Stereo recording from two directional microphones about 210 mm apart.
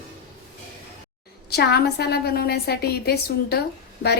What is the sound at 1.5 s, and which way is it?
A woman's voice, 50° left (ahead or behind).